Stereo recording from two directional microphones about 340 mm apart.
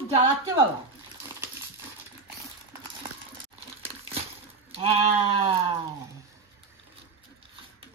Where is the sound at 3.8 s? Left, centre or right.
Centre.